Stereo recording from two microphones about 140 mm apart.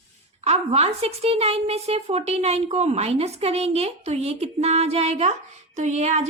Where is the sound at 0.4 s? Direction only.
45° right (ahead or behind).